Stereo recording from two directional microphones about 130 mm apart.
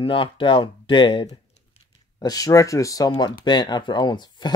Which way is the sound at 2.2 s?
30° left (ahead or behind).